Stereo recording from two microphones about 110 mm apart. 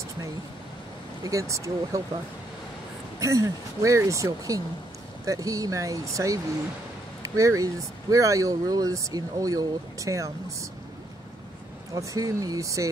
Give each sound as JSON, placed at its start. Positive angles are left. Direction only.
{"t": 1.2, "sound": "speech", "side_deg": -30}
{"t": 3.2, "sound": "speech", "side_deg": -30}
{"t": 11.9, "sound": "speech", "side_deg": -30}